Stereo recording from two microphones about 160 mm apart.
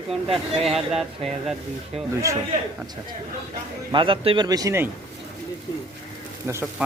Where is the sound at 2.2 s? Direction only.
20° right (ahead or behind).